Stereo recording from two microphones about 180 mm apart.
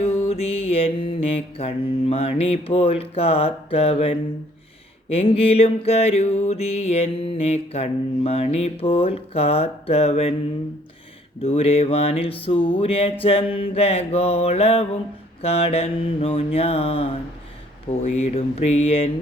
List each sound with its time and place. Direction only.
0.3 s music: 35° left (ahead or behind)
11.4 s music: 35° left (ahead or behind)